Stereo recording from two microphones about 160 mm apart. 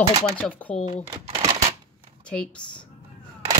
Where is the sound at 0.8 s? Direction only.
45° left (ahead or behind).